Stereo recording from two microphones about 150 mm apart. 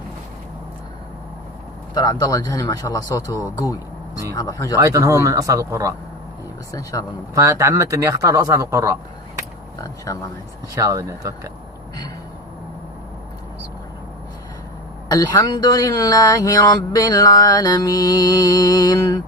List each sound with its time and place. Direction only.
2.0 s speech: 25° left (ahead or behind)
4.8 s speech: 20° right (ahead or behind)
7.3 s speech: 20° right (ahead or behind)
9.8 s speech: 25° left (ahead or behind)
10.8 s speech: 20° right (ahead or behind)
15.1 s speech: 25° left (ahead or behind)